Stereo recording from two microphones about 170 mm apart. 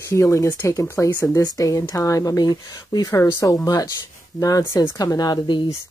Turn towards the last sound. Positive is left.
turn(degrees=25)  # may be behind; listen again after turning